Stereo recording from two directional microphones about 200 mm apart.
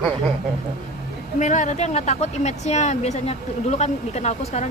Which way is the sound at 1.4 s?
35° left (ahead or behind).